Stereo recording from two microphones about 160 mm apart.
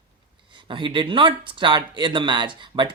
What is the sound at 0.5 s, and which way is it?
Speech, 30° right (ahead or behind).